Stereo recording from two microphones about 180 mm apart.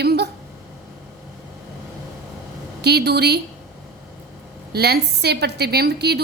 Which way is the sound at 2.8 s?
65° right (ahead or behind).